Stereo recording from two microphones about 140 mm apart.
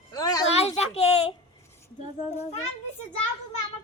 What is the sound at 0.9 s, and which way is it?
Speech, 50° left (ahead or behind).